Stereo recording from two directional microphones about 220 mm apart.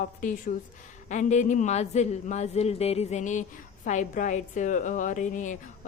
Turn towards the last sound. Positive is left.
turn(degrees=35)  # may be behind; listen again after turning